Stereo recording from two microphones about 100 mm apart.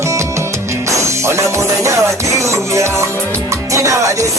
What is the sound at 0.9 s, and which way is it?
Music, 30° right (ahead or behind).